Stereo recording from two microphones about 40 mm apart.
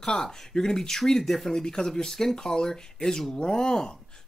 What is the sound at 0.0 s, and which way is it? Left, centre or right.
Speech, centre.